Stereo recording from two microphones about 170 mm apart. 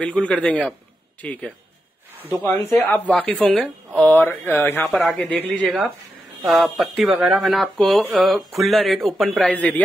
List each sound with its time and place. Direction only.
0.0 s speech: 5° left (ahead or behind)
4.9 s speech: centre (ahead or behind)